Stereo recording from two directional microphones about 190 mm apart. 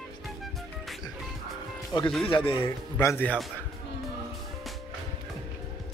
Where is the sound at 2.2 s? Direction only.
30° left (ahead or behind).